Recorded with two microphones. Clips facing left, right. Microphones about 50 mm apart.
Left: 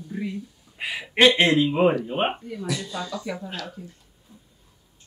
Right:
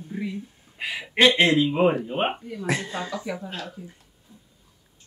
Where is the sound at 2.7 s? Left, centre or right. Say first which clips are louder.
Right 3 dB; right.